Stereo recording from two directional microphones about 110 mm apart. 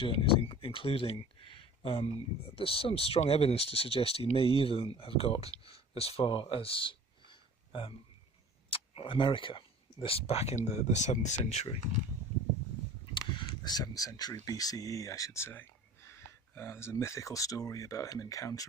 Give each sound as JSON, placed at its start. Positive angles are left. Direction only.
{"t": 0.0, "sound": "speech", "side_deg": 55}
{"t": 13.1, "sound": "a sound", "side_deg": 45}
{"t": 14.4, "sound": "speech", "side_deg": 35}